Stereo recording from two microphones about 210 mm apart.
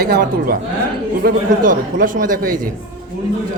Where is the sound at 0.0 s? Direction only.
45° right (ahead or behind).